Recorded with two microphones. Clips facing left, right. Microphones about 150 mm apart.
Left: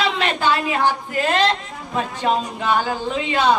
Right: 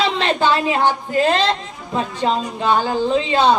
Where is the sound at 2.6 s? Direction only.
30° right (ahead or behind).